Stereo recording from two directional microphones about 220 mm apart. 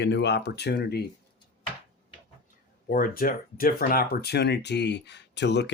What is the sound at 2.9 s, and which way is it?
Speech, 40° left (ahead or behind).